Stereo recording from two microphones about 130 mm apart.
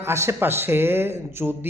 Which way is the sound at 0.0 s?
20° right (ahead or behind).